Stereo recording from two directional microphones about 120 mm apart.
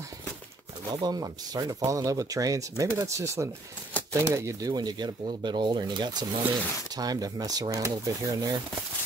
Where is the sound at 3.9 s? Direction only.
15° left (ahead or behind).